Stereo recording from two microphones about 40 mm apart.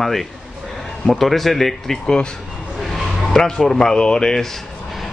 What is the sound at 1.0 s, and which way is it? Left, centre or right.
Speech, centre.